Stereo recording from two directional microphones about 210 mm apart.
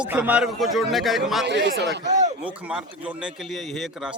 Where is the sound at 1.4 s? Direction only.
55° right (ahead or behind).